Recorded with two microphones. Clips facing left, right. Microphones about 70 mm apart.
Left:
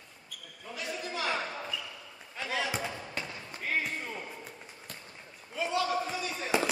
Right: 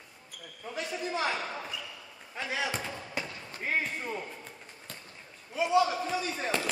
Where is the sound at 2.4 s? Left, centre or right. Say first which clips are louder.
Even; centre.